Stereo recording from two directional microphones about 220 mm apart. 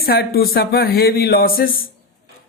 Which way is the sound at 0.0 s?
45° left (ahead or behind).